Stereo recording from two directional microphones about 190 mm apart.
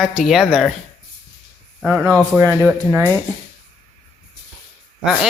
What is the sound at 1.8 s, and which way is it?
Speech, 5° left (ahead or behind).